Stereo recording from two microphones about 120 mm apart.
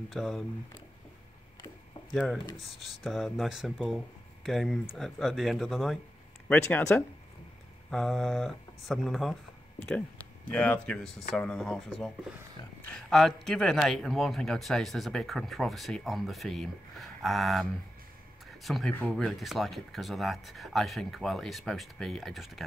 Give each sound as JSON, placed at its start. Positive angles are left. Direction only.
{"t": 0.1, "sound": "a man's voice", "side_deg": 0}
{"t": 2.8, "sound": "a man's voice", "side_deg": 0}
{"t": 6.6, "sound": "speech", "side_deg": 20}
{"t": 7.9, "sound": "a man's voice", "side_deg": 5}
{"t": 10.5, "sound": "a man's voice", "side_deg": 10}